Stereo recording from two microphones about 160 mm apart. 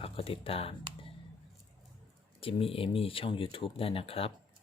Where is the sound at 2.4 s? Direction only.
35° left (ahead or behind).